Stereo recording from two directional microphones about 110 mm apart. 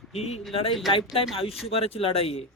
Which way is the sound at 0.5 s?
60° left (ahead or behind).